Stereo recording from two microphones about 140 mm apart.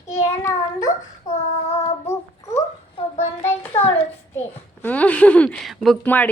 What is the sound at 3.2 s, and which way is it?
Speech, 55° left (ahead or behind).